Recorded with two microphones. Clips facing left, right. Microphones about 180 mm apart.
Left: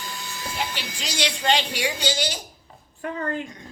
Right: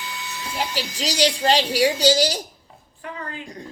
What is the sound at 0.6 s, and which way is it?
Speech, 40° right (ahead or behind).